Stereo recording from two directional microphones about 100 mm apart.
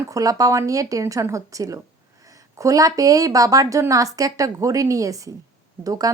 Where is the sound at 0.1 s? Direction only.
35° right (ahead or behind).